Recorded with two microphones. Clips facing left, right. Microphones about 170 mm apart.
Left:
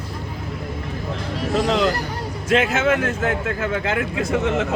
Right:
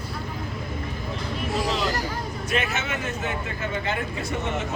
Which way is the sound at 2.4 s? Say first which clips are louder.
Left 10 dB; 90° left.